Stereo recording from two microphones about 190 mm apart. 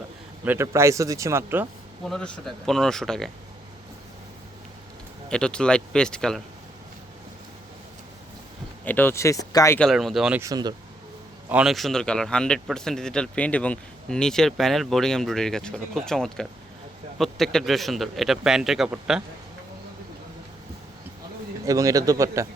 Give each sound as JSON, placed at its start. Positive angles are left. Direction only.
{"t": 0.4, "sound": "speech", "side_deg": -15}
{"t": 2.0, "sound": "speech", "side_deg": 5}
{"t": 5.3, "sound": "speech", "side_deg": 5}
{"t": 8.8, "sound": "speech", "side_deg": 10}
{"t": 9.7, "sound": "speech", "side_deg": 0}
{"t": 10.4, "sound": "speech", "side_deg": -20}
{"t": 11.4, "sound": "speech", "side_deg": -5}
{"t": 21.7, "sound": "speech", "side_deg": -20}